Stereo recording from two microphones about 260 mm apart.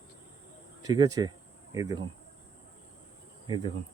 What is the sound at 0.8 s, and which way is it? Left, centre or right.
Speech, centre.